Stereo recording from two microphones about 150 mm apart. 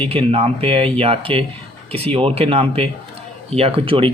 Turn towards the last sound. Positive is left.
turn(degrees=-35)  # may be behind; listen again after turning